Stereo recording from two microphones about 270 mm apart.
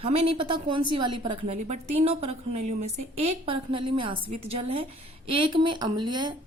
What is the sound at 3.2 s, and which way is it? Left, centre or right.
A woman's voice, centre.